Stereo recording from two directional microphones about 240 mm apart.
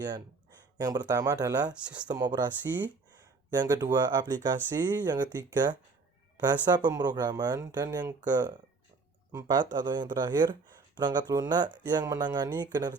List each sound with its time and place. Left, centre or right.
0.8 s speech: centre
1.7 s speech: centre
2.0 s speech: centre